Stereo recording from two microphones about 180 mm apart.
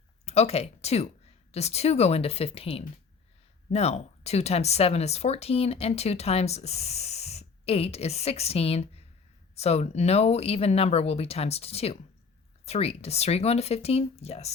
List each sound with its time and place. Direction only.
0.3 s speech: 35° left (ahead or behind)